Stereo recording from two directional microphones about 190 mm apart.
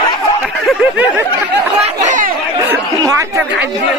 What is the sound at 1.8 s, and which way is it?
Speech, 40° right (ahead or behind).